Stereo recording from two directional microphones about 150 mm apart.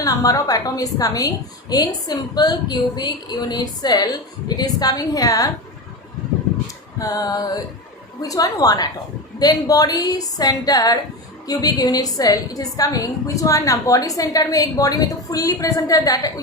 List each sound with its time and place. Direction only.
0.0 s a woman's voice: 25° left (ahead or behind)
7.0 s a woman's voice: 25° left (ahead or behind)